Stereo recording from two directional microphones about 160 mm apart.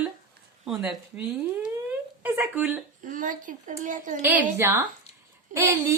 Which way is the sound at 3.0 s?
55° right (ahead or behind).